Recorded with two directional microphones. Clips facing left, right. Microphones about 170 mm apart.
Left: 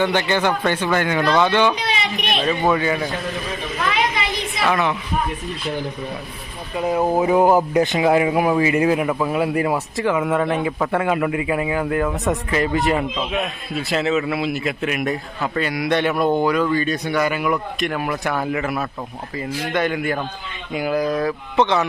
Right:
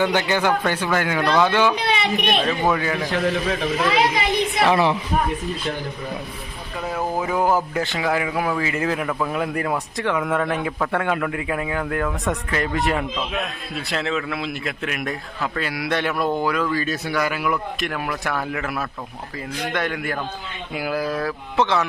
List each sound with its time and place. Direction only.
0.0 s a man's voice: 10° right (ahead or behind)
1.7 s a child's voice: 55° right (ahead or behind)
2.5 s a man's voice: centre (ahead or behind)
4.6 s a woman's voice: 30° right (ahead or behind)
6.7 s a man's voice: 20° left (ahead or behind); by 21.8 s centre (ahead or behind)